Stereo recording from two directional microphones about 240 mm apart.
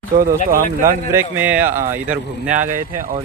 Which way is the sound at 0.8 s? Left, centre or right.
Centre.